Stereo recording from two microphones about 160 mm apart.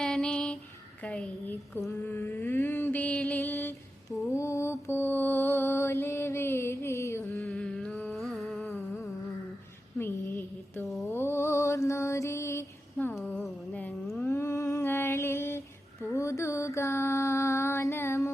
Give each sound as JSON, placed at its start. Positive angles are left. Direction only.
{"t": 0.0, "sound": "a sound", "side_deg": 5}
{"t": 1.0, "sound": "a woman's voice", "side_deg": 5}
{"t": 2.0, "sound": "mantra", "side_deg": 15}
{"t": 7.4, "sound": "music", "side_deg": 5}
{"t": 10.0, "sound": "a sound", "side_deg": 15}
{"t": 10.8, "sound": "a sound", "side_deg": 0}
{"t": 11.1, "sound": "mantra", "side_deg": 15}
{"t": 13.2, "sound": "humming", "side_deg": 10}
{"t": 16.1, "sound": "mantra", "side_deg": 20}